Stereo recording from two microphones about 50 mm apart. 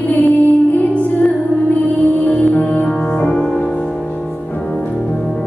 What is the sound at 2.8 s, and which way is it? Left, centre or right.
Music, centre.